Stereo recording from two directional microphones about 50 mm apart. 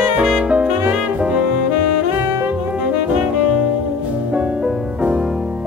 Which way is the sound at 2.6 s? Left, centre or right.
Right.